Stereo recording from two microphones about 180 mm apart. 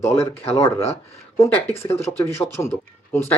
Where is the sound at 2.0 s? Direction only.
15° left (ahead or behind).